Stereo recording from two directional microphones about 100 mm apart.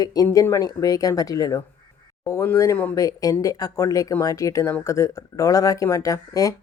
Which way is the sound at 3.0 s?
35° left (ahead or behind).